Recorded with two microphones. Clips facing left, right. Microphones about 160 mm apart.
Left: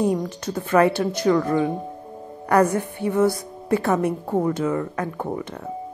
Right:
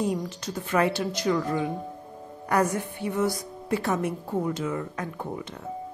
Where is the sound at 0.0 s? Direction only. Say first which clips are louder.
Left 6 dB; 50° left (ahead or behind).